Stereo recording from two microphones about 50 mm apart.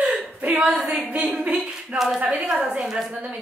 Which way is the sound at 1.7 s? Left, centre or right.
Centre.